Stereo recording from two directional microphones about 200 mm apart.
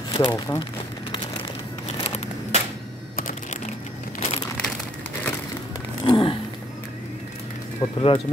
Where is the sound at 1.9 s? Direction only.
30° left (ahead or behind).